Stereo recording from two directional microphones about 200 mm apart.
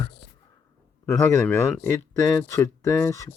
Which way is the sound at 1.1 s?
10° left (ahead or behind).